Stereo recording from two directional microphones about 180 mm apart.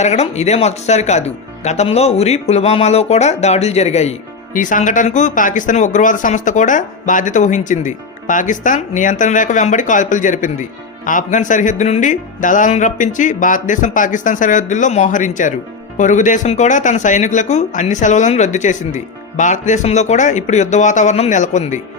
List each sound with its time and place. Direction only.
0.0 s speech: 40° left (ahead or behind)